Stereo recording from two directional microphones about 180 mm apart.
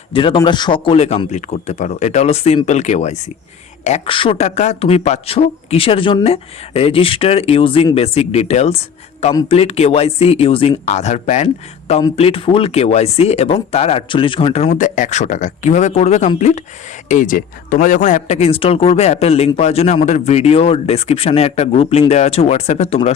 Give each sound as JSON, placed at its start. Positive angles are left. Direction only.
{"t": 0.1, "sound": "a man's voice", "side_deg": 30}